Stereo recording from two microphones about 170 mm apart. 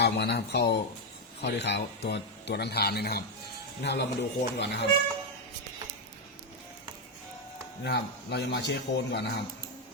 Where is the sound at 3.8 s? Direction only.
85° left.